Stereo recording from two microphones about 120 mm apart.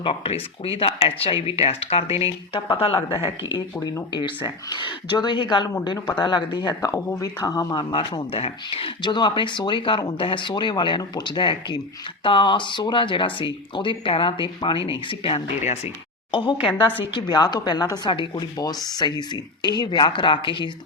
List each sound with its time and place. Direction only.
0.0 s a woman's voice: 55° left (ahead or behind); by 6.9 s 35° left (ahead or behind)
6.9 s a woman's voice: 25° left (ahead or behind)
8.3 s a woman's voice: 50° left (ahead or behind)